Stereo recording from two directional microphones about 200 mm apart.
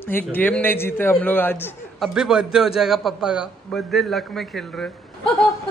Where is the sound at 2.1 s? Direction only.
5° right (ahead or behind).